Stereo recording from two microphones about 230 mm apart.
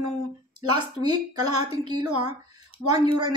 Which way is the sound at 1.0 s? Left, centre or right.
Right.